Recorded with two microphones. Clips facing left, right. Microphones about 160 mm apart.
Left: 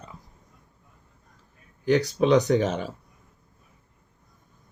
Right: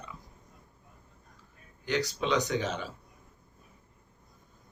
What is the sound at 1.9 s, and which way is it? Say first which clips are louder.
Speech: left 9 dB; 55° left (ahead or behind).